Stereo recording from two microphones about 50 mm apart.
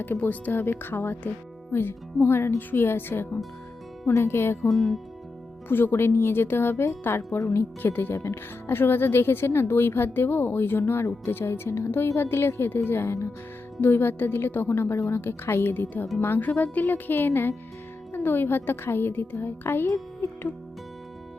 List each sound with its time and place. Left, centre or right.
0.0 s speech: left
4.0 s speech: left
4.7 s speech: centre
5.6 s speech: left
8.2 s speech: left